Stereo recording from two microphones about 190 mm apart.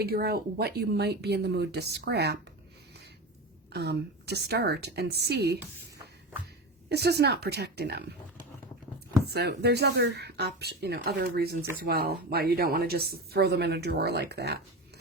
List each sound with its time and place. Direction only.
0.0 s speech: 55° right (ahead or behind)
3.7 s speech: 60° right (ahead or behind)
6.8 s speech: 60° right (ahead or behind)
9.3 s speech: 60° right (ahead or behind)